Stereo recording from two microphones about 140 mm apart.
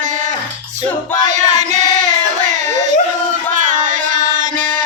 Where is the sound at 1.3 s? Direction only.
55° right (ahead or behind).